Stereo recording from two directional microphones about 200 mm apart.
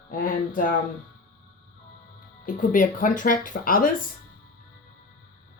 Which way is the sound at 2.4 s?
40° left (ahead or behind).